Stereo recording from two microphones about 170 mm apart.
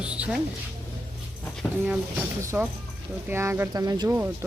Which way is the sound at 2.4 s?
15° right (ahead or behind).